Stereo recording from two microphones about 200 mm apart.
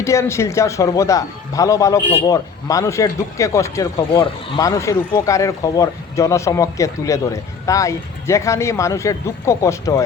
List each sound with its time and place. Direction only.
0.0 s speech: 15° left (ahead or behind)